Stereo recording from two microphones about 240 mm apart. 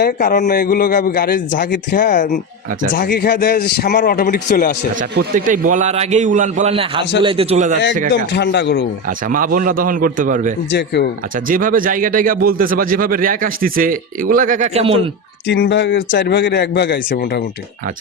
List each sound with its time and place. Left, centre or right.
0.0 s a man's voice: left
4.9 s a man's voice: right
8.1 s speech: left
9.0 s speech: right
10.7 s speech: left
11.3 s speech: right
15.4 s speech: left